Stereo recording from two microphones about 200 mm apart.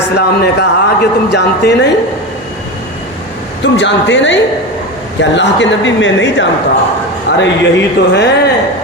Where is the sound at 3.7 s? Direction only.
65° left (ahead or behind).